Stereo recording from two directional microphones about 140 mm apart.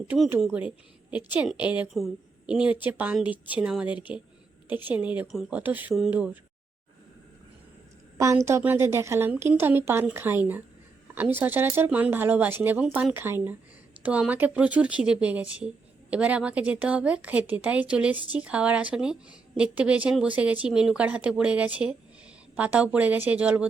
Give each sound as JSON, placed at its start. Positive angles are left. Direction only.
{"t": 0.3, "sound": "speech", "side_deg": -10}
{"t": 8.4, "sound": "speech", "side_deg": -15}